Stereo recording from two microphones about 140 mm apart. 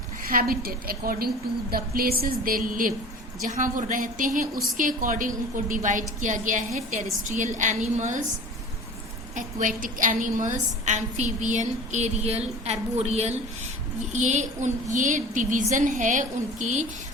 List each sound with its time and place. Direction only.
0.3 s a woman's voice: 90° right
3.4 s a woman's voice: 65° right (ahead or behind)
9.3 s a woman's voice: 70° right (ahead or behind)